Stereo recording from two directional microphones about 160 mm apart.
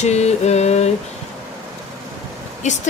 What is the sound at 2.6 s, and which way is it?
Speech, 45° left (ahead or behind).